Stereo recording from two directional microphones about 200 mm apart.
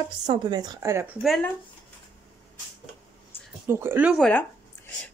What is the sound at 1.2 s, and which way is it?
Speech, centre (ahead or behind).